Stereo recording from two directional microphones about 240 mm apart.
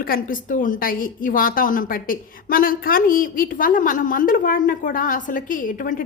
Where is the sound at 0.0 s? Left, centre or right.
Left.